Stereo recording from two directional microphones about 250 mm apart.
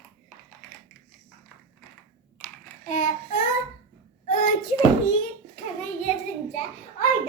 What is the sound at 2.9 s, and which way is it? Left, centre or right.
Child singing, left.